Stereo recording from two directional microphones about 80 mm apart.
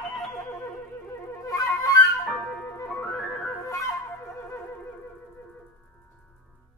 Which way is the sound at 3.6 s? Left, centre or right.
Left.